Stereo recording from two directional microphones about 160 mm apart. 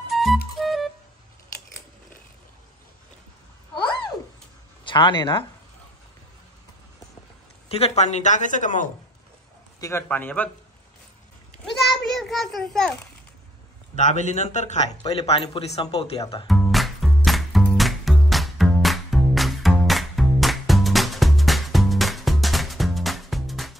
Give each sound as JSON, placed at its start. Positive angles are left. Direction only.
{"t": 0.1, "sound": "music", "side_deg": 0}
{"t": 3.7, "sound": "a sound", "side_deg": 30}
{"t": 4.8, "sound": "speech", "side_deg": 30}
{"t": 7.6, "sound": "speech", "side_deg": 40}
{"t": 9.8, "sound": "a man's voice", "side_deg": 20}
{"t": 12.1, "sound": "a sound", "side_deg": 0}
{"t": 13.9, "sound": "speech", "side_deg": 50}
{"t": 16.4, "sound": "music", "side_deg": 0}